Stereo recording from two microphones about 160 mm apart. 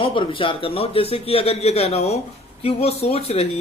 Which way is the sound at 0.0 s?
30° left (ahead or behind).